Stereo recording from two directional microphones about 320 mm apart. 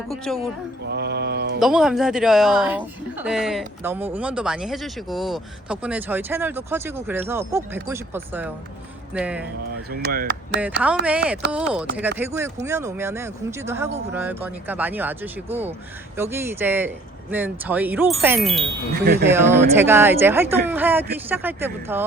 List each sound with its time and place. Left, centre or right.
0.1 s speech: centre
0.9 s a sound: right
1.5 s speech: centre
9.9 s speech: right
11.0 s speech: centre
18.9 s a sound: right
19.2 s speech: centre